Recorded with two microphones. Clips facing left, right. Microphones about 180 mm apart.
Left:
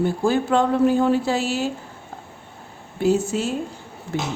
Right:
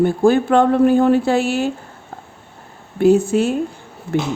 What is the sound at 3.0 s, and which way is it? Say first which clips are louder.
Speech: right 7 dB; 55° right (ahead or behind).